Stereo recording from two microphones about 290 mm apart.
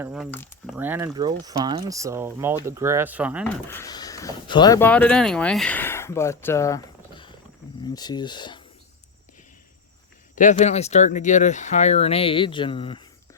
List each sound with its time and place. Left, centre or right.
0.0 s speech: centre
0.8 s speech: centre
3.7 s speech: centre
10.3 s speech: left